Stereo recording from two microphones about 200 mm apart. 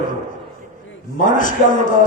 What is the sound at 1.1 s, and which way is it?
Speech, 40° left (ahead or behind).